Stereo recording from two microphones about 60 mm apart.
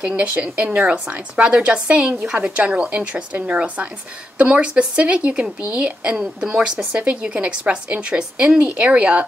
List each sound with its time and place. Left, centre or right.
0.0 s a woman's voice: right